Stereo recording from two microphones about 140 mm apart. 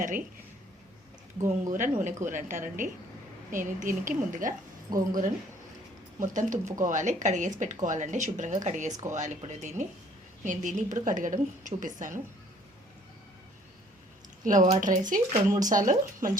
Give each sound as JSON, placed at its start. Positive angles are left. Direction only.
{"t": 1.5, "sound": "a woman's voice", "side_deg": -65}
{"t": 4.9, "sound": "speech", "side_deg": -90}
{"t": 6.1, "sound": "speech", "side_deg": -65}
{"t": 8.9, "sound": "speech", "side_deg": -25}
{"t": 9.1, "sound": "speech", "side_deg": -60}
{"t": 14.4, "sound": "a woman's voice", "side_deg": -65}